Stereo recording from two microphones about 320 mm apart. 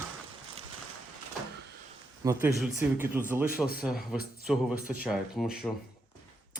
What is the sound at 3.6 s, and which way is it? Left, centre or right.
Speech, centre.